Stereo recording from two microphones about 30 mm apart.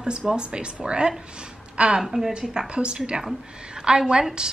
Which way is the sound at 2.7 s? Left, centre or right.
Right.